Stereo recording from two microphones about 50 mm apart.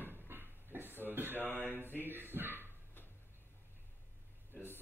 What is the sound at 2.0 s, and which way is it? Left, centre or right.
Dog, right.